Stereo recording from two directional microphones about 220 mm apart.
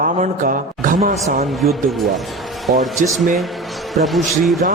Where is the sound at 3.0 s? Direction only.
Centre (ahead or behind).